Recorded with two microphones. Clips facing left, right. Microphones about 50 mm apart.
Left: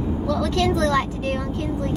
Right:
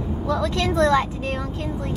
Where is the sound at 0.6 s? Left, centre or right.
Right.